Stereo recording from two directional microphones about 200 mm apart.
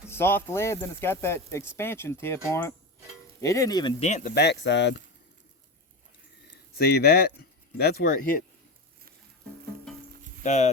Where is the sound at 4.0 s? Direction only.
40° left (ahead or behind); by 5.0 s 60° left (ahead or behind).